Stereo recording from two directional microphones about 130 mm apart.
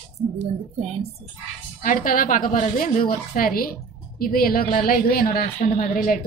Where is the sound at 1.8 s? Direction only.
90° left.